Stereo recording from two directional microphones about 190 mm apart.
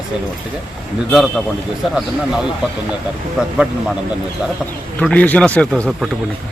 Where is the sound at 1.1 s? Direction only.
Centre (ahead or behind).